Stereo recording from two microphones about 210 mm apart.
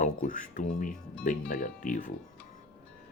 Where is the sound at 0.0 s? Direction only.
40° left (ahead or behind).